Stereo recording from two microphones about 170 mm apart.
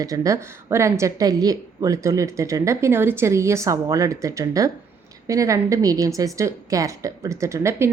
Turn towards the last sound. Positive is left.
turn(degrees=-15)  # may be behind; listen again after turning